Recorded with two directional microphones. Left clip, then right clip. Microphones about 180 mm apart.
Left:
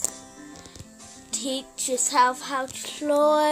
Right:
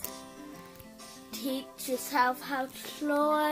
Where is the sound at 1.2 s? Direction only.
Centre (ahead or behind).